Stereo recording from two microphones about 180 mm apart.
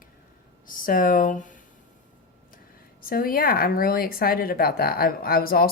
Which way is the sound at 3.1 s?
55° left (ahead or behind).